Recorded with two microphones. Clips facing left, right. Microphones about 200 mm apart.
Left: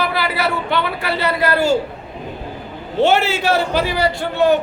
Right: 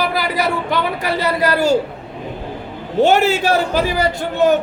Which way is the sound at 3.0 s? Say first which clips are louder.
Right 2 dB; 40° right (ahead or behind).